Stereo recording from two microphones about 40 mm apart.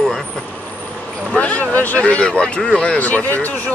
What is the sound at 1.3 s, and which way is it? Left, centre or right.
Vehicle, left.